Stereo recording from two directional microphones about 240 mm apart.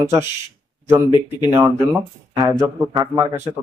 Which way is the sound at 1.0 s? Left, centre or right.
Centre.